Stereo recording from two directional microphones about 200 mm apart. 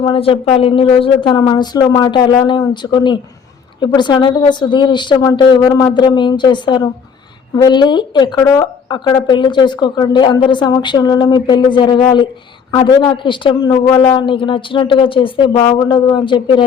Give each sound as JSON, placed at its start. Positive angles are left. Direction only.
{"t": 0.0, "sound": "a woman's voice", "side_deg": 25}